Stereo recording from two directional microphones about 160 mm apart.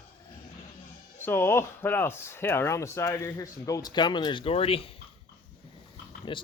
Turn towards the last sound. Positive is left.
turn(degrees=30)  # may be behind; listen again after turning